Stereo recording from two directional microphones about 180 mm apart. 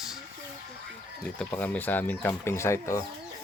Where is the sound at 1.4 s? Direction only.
10° left (ahead or behind).